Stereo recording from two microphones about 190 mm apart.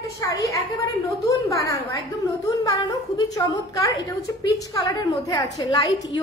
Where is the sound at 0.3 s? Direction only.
20° left (ahead or behind).